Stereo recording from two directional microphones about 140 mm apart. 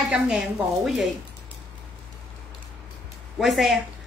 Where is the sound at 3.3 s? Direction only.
Centre (ahead or behind).